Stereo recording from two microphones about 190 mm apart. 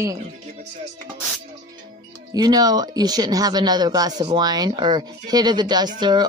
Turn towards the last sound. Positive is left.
turn(degrees=-20)  # may be behind; listen again after turning